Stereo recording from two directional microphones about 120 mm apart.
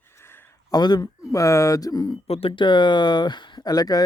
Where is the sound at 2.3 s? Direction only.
55° left (ahead or behind); by 4.0 s 35° left (ahead or behind).